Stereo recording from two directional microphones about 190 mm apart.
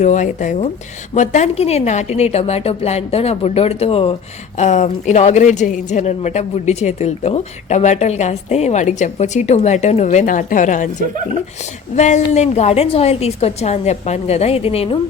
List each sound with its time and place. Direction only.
0.0 s a woman's voice: 40° left (ahead or behind)
11.9 s a woman's voice: 40° left (ahead or behind)